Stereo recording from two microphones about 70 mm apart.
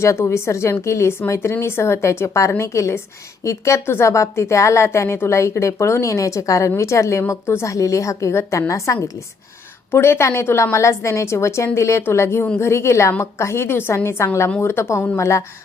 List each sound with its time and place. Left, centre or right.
0.0 s a woman's voice: left
9.9 s a woman's voice: left